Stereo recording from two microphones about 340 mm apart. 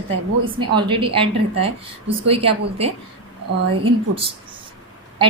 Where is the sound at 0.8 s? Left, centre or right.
Centre.